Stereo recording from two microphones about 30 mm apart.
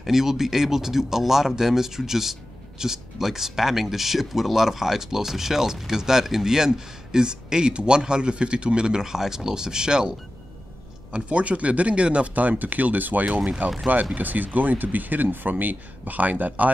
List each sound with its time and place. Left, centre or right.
0.0 s speech: centre; by 9.0 s right
9.0 s speech: centre
11.2 s speech: right
12.4 s speech: right
13.6 s speech: right